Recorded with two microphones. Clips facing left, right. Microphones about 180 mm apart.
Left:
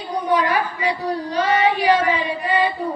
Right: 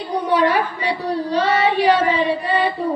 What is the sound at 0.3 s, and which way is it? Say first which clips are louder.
Child singing: right 2 dB; 30° right (ahead or behind).